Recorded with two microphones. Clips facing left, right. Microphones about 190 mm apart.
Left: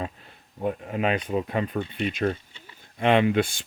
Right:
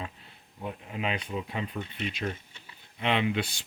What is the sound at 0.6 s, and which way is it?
Speech, 50° left (ahead or behind).